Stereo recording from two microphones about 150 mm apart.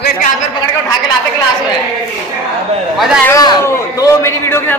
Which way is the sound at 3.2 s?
20° left (ahead or behind).